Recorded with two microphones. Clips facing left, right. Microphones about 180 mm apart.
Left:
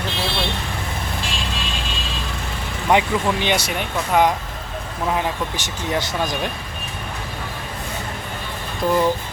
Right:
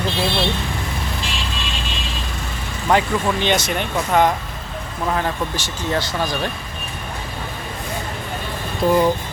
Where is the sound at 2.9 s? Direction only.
15° left (ahead or behind).